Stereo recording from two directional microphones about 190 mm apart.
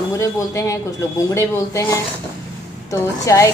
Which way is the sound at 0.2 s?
15° left (ahead or behind).